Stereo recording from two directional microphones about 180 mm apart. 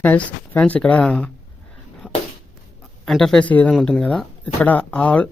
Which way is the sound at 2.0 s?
10° left (ahead or behind).